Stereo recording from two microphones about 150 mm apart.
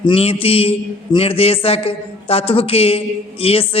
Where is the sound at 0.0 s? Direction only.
40° left (ahead or behind).